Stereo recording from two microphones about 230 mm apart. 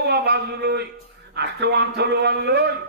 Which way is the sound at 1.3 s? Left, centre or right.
Right.